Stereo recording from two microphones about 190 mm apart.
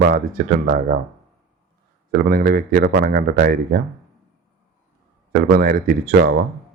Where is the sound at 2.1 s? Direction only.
50° right (ahead or behind).